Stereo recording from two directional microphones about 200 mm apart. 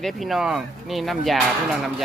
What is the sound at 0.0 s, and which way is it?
Speech, centre (ahead or behind).